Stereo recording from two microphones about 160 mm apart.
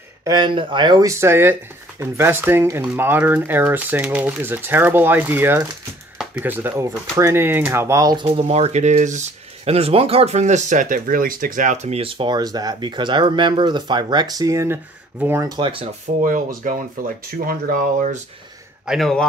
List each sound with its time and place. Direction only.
0.2 s speech: 25° right (ahead or behind)
8.3 s speech: 40° right (ahead or behind)
16.2 s speech: 55° right (ahead or behind)
18.9 s speech: centre (ahead or behind)